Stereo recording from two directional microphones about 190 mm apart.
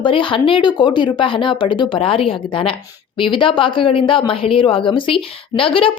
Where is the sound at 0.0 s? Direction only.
25° left (ahead or behind).